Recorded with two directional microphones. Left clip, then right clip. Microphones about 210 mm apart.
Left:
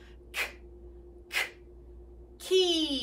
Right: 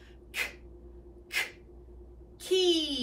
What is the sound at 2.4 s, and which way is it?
Speech, 15° left (ahead or behind).